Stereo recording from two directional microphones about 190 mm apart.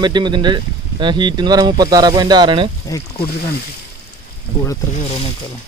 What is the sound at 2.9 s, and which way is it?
Speech, 20° left (ahead or behind).